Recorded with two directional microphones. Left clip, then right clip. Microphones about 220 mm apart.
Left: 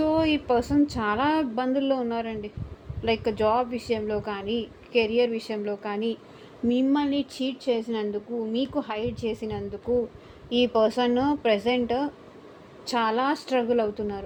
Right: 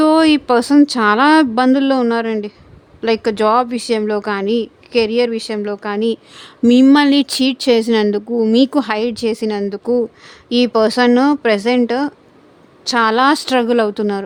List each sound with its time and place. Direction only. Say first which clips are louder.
0.0 s speech: right 12 dB; 40° right (ahead or behind)
6.7 s speech: right 14 dB; 50° right (ahead or behind)